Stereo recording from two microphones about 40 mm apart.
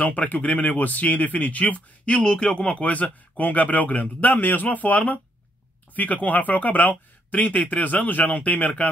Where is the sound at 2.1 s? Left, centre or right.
Left.